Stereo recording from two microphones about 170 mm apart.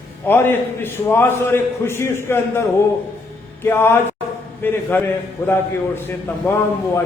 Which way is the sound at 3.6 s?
15° left (ahead or behind).